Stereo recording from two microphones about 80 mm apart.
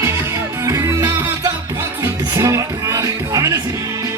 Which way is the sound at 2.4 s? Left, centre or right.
Right.